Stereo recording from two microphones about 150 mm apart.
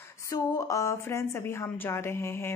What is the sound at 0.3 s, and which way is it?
A woman's voice, 25° left (ahead or behind).